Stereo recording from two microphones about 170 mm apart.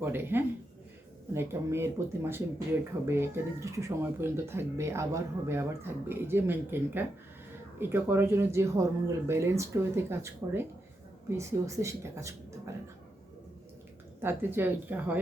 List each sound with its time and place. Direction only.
0.0 s speech: 15° right (ahead or behind)
14.2 s speech: 10° right (ahead or behind)